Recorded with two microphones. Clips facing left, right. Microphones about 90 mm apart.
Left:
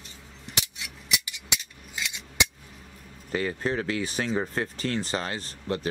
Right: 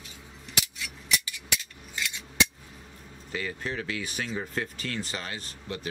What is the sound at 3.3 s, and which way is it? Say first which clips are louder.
Speech: left 6 dB; 40° left (ahead or behind).